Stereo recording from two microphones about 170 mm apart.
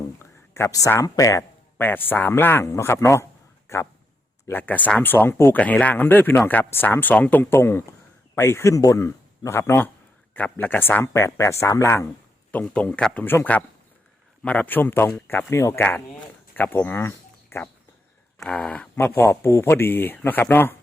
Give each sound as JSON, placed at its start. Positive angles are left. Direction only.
{"t": 0.2, "sound": "speech", "side_deg": 15}